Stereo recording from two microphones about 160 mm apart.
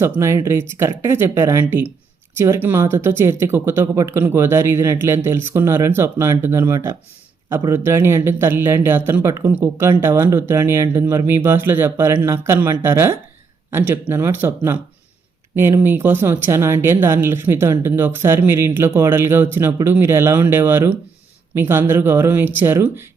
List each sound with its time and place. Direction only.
0.0 s speech: 15° right (ahead or behind)